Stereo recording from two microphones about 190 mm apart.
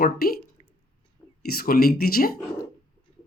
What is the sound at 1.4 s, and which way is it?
Speech, 50° left (ahead or behind).